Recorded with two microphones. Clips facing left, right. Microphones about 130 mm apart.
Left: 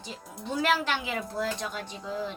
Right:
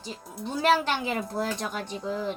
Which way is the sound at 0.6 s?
35° right (ahead or behind).